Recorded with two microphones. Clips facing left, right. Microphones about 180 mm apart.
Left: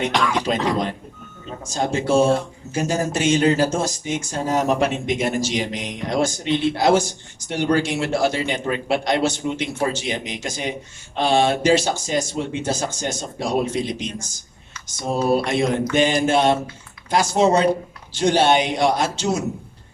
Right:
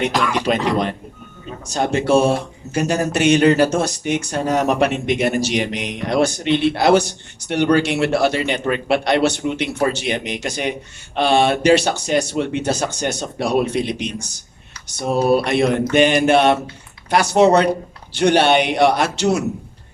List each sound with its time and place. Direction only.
0.1 s speech: centre (ahead or behind)
0.7 s speech: 70° right (ahead or behind)